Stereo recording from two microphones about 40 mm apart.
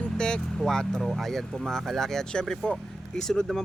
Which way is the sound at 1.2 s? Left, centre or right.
Centre.